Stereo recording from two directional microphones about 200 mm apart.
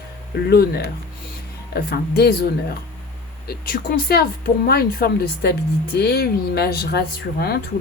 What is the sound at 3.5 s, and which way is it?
Speech, 50° left (ahead or behind).